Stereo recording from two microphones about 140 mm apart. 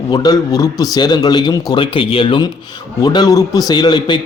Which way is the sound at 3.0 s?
30° left (ahead or behind).